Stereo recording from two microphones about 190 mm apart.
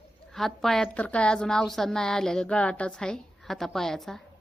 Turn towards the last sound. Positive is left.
turn(degrees=0)  # may be behind; listen again after turning